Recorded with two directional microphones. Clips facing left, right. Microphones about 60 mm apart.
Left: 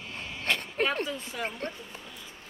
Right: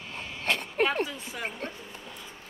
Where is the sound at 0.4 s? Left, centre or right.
Centre.